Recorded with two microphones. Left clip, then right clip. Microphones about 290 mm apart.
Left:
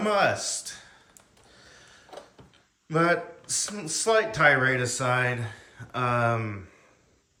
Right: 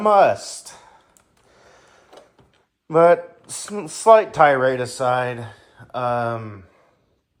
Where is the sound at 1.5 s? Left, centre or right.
Centre.